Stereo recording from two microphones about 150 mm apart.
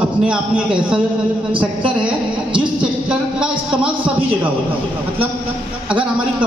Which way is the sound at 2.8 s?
5° right (ahead or behind).